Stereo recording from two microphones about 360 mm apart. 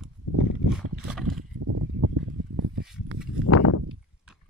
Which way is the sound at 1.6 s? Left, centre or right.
Right.